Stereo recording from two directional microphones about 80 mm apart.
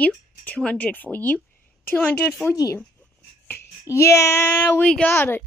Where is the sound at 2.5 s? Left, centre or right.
Left.